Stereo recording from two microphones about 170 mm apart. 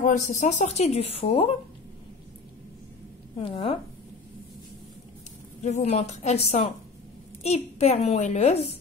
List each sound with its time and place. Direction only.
0.0 s speech: 45° left (ahead or behind)
3.3 s speech: 30° left (ahead or behind)
5.6 s speech: 40° left (ahead or behind)